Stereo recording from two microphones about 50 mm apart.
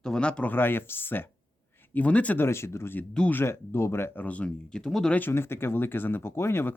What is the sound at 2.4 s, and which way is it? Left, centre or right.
Speech, left.